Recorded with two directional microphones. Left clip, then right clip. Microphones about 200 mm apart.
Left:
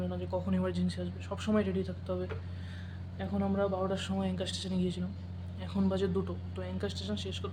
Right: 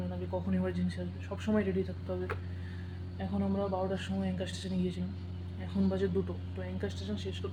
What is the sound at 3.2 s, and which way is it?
Speech, 15° left (ahead or behind).